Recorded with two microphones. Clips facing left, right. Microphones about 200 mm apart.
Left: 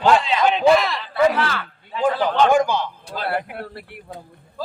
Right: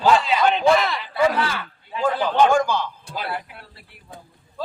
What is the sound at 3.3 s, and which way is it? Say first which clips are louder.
Speech: left 6 dB; 60° left (ahead or behind).